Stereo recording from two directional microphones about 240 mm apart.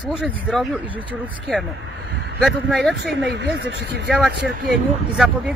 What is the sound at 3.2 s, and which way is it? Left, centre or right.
Speech, right.